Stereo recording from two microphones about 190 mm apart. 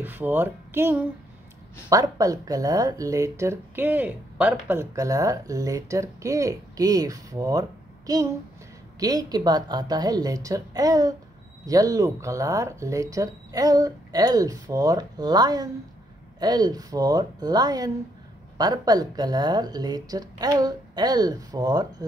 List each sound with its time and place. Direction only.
0.0 s speech: 10° right (ahead or behind)